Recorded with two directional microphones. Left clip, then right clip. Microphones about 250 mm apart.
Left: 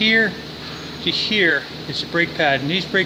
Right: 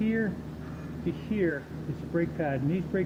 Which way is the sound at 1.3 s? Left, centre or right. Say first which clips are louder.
Left 12 dB; centre.